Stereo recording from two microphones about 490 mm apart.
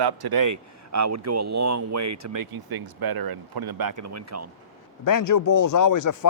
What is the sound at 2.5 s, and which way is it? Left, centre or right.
Speech, right.